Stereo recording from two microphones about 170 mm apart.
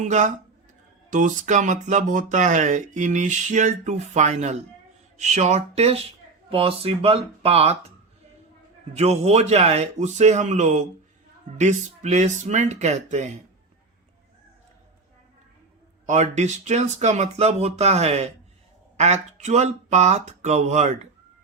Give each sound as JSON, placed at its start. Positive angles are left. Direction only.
{"t": 0.0, "sound": "speech", "side_deg": -45}
{"t": 9.0, "sound": "speech", "side_deg": -40}
{"t": 16.0, "sound": "speech", "side_deg": -45}